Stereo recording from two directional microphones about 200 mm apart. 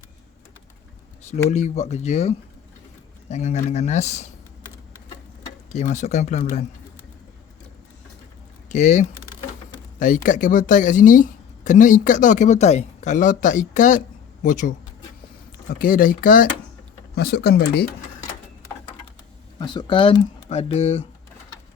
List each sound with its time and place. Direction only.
1.5 s speech: 35° left (ahead or behind)
5.7 s speech: 35° left (ahead or behind)
8.7 s speech: 35° left (ahead or behind)
10.2 s speech: 40° left (ahead or behind)
15.8 s speech: 45° left (ahead or behind)
19.5 s speech: 20° left (ahead or behind)